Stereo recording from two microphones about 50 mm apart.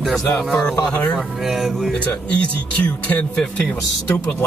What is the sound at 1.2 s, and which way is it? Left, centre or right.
Speech, centre.